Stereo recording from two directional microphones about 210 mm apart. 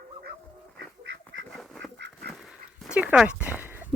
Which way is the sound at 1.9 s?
55° right (ahead or behind).